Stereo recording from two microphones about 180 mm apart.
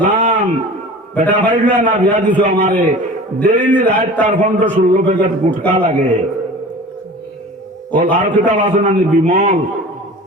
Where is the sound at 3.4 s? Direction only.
45° right (ahead or behind).